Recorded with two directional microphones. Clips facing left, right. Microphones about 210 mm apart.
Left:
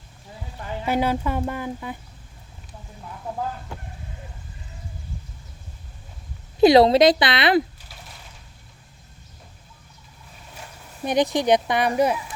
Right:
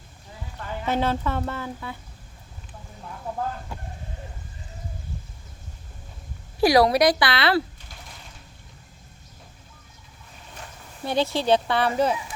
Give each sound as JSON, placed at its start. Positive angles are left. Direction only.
{"t": 0.6, "sound": "speech", "side_deg": 10}
{"t": 6.6, "sound": "a woman's voice", "side_deg": 25}
{"t": 11.0, "sound": "speech", "side_deg": 15}